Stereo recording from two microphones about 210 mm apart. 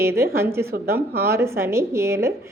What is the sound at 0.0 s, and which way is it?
Speech, 10° right (ahead or behind).